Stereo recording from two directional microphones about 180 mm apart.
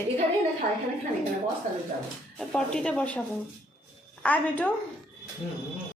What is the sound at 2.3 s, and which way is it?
Speech, 5° left (ahead or behind).